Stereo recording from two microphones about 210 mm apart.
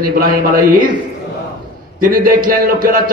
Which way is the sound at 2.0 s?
40° right (ahead or behind).